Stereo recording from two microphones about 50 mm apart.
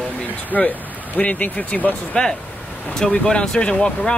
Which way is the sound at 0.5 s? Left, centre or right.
Left.